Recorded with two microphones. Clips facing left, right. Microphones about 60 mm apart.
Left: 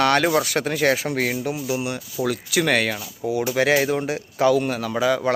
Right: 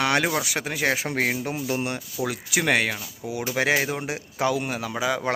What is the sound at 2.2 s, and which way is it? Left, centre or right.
A man's voice, right.